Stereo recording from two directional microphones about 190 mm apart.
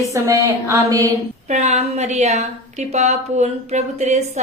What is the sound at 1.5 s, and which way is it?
Speech, 35° right (ahead or behind).